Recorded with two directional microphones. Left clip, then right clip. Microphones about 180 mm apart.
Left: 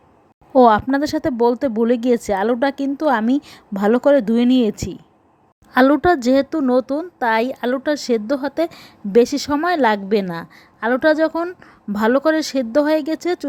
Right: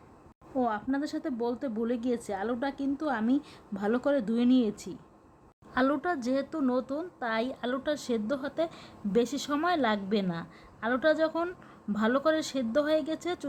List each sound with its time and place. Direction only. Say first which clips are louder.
0.5 s a woman's voice: left 18 dB; 45° left (ahead or behind)